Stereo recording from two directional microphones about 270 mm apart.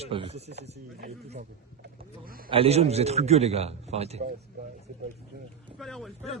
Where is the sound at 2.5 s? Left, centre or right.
Right.